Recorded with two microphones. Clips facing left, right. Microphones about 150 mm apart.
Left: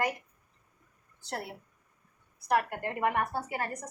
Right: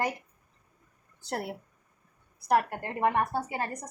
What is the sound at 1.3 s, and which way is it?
Speech, 45° right (ahead or behind).